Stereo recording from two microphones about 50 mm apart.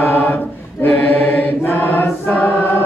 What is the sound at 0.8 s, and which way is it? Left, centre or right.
Mantra, left.